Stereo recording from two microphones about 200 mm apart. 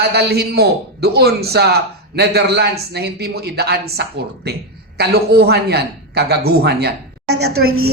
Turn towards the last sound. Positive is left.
turn(degrees=-90)